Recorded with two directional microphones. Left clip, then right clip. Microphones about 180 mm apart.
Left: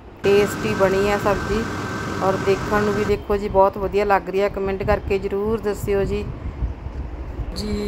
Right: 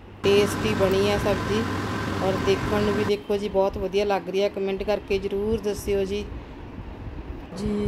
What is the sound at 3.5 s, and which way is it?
Music, centre (ahead or behind).